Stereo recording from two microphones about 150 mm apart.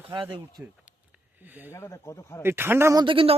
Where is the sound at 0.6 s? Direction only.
10° right (ahead or behind).